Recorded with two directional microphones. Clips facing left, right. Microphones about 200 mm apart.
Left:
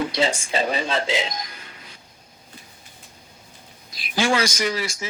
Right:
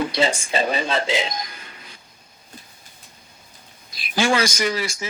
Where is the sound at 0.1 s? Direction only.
55° right (ahead or behind).